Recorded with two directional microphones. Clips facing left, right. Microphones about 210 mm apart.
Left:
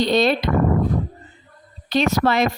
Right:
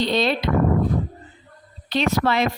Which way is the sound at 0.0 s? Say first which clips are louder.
Left 3 dB; 45° left (ahead or behind).